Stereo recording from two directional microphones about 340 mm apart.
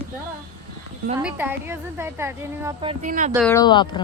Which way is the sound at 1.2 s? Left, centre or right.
Centre.